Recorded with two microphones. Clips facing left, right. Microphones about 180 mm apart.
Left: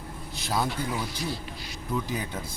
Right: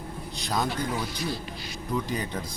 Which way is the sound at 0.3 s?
5° left (ahead or behind).